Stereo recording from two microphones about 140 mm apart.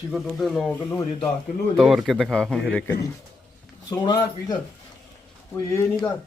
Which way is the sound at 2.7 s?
10° left (ahead or behind).